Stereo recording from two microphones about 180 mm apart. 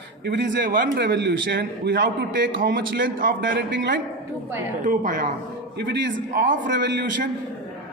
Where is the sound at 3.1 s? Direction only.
55° right (ahead or behind).